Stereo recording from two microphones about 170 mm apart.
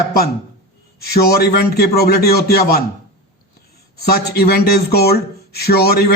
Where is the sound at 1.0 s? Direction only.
70° left (ahead or behind).